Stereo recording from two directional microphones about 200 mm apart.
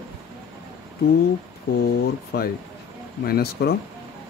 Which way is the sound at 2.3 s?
55° left (ahead or behind).